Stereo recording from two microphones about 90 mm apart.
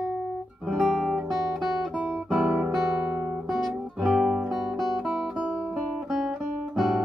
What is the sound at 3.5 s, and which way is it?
Guitar, centre (ahead or behind).